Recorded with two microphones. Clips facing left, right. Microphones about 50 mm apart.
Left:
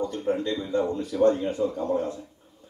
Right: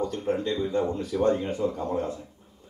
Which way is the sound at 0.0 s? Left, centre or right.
Left.